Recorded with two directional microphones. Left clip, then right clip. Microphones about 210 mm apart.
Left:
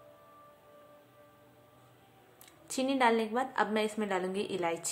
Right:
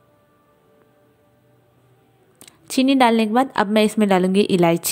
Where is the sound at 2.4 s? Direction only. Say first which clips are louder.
Right 14 dB; 40° right (ahead or behind).